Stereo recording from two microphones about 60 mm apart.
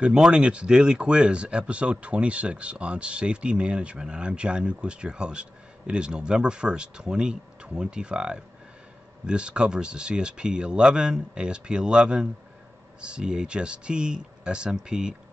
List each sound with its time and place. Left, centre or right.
0.0 s speech: centre